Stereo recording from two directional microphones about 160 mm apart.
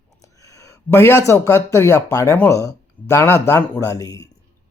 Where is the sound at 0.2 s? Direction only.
20° left (ahead or behind).